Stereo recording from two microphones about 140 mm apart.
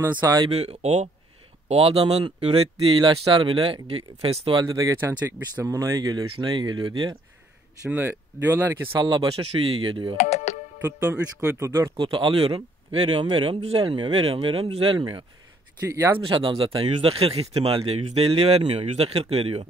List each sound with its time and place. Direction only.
0.5 s speech: 45° right (ahead or behind)
4.6 s speech: 25° right (ahead or behind)
7.9 s speech: 15° right (ahead or behind)
9.0 s speech: 35° right (ahead or behind)
10.1 s music: 50° left (ahead or behind)
10.8 s speech: 20° right (ahead or behind)
12.0 s speech: 35° right (ahead or behind)
15.9 s speech: 20° right (ahead or behind)
16.2 s speech: 35° right (ahead or behind)